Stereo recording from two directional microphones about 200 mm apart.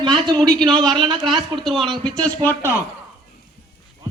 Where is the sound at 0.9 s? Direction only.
25° right (ahead or behind).